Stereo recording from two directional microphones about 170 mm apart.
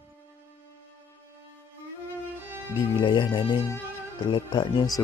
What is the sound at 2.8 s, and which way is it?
Speech, 30° left (ahead or behind).